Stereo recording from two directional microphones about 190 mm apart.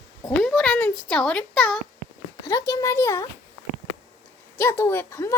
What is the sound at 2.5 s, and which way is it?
Speech, 15° left (ahead or behind).